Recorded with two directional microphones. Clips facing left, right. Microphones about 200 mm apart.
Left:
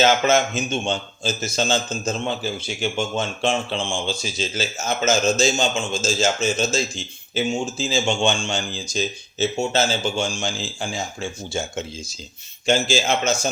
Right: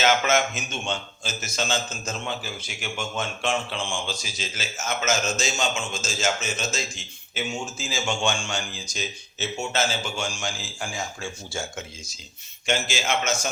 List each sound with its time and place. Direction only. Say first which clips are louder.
0.0 s a man's voice: left 4 dB; 30° left (ahead or behind)